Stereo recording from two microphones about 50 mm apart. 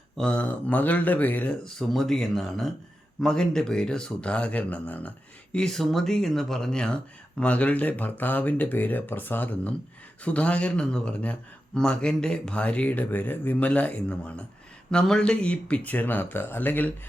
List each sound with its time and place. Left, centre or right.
0.2 s speech: left
1.6 s speech: centre; by 5.5 s left
5.5 s speech: centre; by 9.7 s left
10.2 s speech: left
12.9 s speech: left
13.6 s speech: left